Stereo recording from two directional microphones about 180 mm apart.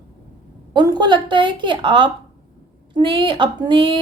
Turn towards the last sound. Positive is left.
turn(degrees=-25)  # may be behind; listen again after turning